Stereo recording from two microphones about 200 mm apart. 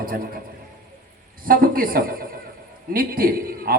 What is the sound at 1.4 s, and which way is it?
A man's voice, 45° right (ahead or behind).